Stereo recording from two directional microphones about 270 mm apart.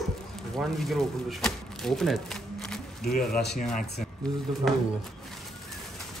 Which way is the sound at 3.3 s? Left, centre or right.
Centre.